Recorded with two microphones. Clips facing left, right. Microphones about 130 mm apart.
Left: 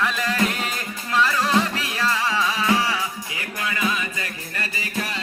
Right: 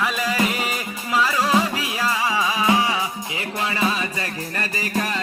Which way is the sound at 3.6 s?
30° right (ahead or behind).